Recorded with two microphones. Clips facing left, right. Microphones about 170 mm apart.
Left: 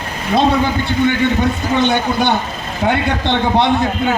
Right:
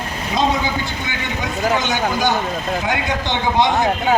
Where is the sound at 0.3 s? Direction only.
60° left (ahead or behind).